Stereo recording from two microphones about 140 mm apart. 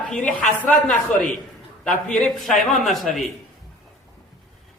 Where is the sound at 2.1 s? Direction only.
5° left (ahead or behind).